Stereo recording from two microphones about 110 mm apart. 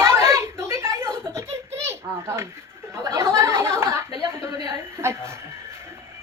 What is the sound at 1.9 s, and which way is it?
Children playing, 25° right (ahead or behind).